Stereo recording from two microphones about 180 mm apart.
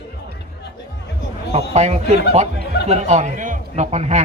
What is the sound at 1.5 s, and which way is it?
A man's voice, 40° right (ahead or behind).